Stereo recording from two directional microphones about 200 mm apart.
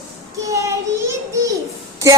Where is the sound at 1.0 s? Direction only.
15° right (ahead or behind).